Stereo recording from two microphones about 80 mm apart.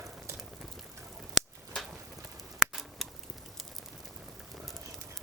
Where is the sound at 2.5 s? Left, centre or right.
Centre.